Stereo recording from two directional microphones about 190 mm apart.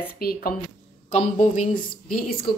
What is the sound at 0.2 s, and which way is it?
Speech, 50° left (ahead or behind).